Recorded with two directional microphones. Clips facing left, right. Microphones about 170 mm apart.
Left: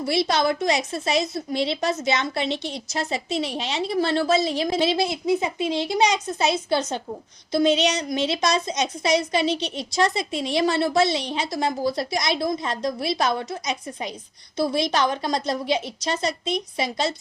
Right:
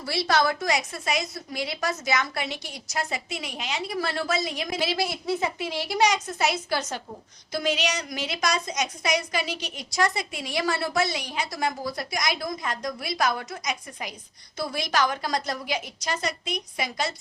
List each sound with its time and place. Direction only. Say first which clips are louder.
0.0 s a woman's voice: left 3 dB; 20° left (ahead or behind)